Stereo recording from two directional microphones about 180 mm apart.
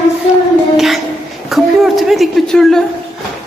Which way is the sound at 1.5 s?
Centre (ahead or behind).